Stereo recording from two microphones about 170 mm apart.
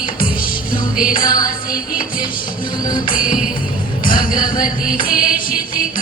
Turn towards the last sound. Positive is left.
turn(degrees=55)  # may be behind; listen again after turning